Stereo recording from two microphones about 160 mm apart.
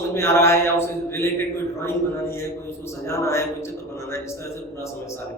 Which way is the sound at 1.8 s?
15° left (ahead or behind).